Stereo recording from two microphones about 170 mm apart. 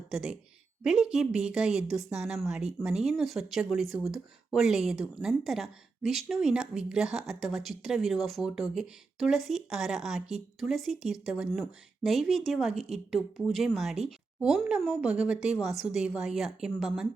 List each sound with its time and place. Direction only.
0.1 s a woman's voice: 5° right (ahead or behind)